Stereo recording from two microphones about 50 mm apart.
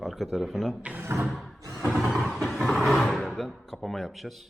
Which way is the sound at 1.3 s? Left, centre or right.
Centre.